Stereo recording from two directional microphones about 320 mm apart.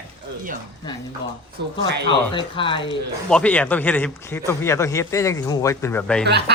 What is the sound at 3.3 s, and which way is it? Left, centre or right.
Speech, centre.